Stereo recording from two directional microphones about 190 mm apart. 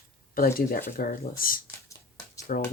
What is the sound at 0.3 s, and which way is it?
Speech, 50° left (ahead or behind).